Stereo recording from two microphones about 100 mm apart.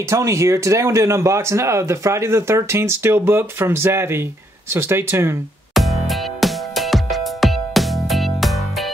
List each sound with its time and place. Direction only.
0.1 s speech: 30° right (ahead or behind)
5.8 s music: centre (ahead or behind)